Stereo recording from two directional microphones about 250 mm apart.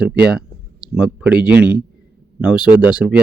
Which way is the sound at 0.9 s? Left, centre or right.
Centre.